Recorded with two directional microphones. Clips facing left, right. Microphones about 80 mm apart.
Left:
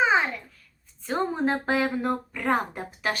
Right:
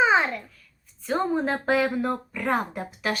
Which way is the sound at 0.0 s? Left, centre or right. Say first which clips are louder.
Right 2 dB; centre.